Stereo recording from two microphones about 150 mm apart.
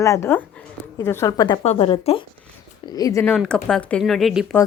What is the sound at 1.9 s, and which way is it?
Speech, 35° left (ahead or behind).